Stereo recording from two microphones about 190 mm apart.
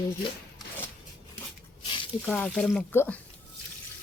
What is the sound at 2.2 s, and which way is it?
Speech, 5° left (ahead or behind).